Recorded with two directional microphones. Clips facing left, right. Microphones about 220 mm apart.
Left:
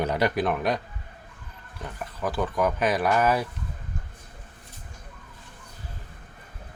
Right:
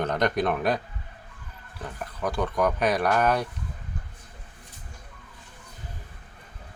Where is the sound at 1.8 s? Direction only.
Centre (ahead or behind).